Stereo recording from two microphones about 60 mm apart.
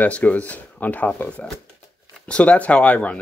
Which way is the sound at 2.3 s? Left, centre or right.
Centre.